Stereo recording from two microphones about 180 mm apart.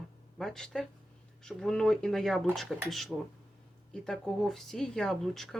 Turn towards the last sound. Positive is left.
turn(degrees=0)  # may be behind; listen again after turning